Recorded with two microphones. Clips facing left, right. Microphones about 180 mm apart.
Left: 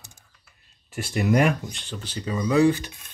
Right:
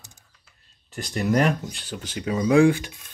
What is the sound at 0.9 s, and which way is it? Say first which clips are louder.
Speech: left 2 dB; 40° right (ahead or behind).